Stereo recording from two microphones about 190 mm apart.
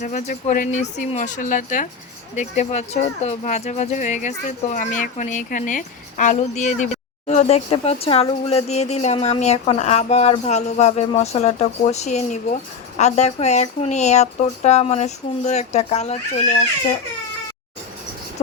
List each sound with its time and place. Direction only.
0.0 s speech: 40° left (ahead or behind)